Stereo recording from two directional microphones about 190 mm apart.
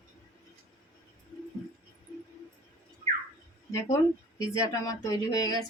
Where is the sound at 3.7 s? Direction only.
15° left (ahead or behind).